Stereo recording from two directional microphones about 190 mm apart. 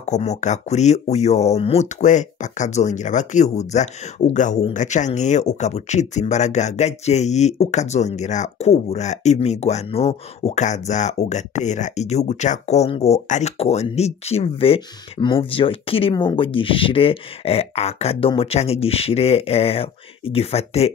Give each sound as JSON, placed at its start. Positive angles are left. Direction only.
{"t": 0.0, "sound": "speech", "side_deg": 35}